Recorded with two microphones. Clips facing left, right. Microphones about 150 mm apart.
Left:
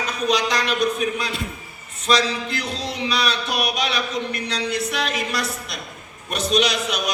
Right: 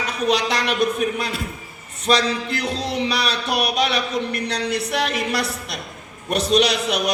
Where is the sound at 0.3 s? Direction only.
65° right (ahead or behind).